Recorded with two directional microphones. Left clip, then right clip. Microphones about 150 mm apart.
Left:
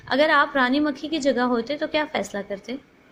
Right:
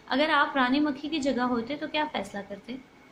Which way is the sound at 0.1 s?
40° left (ahead or behind).